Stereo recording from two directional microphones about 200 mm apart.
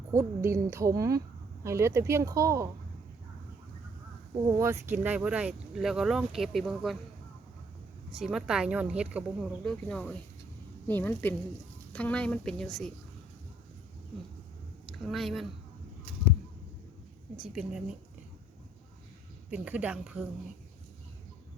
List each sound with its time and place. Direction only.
0.1 s a woman's voice: 15° right (ahead or behind)
4.5 s speech: 15° right (ahead or behind)
8.1 s speech: 5° right (ahead or behind)
14.8 s speech: centre (ahead or behind)
17.3 s speech: 5° right (ahead or behind)
19.5 s a woman's voice: 5° right (ahead or behind)